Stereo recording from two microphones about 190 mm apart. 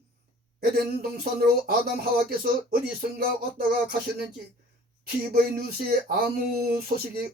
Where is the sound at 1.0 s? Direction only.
55° right (ahead or behind).